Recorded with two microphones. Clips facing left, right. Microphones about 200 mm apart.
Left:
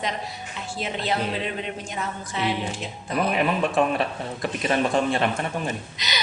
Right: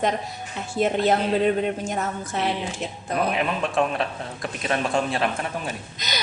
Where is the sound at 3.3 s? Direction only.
5° left (ahead or behind).